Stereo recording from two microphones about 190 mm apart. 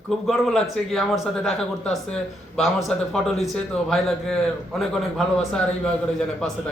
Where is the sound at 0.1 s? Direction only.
Centre (ahead or behind).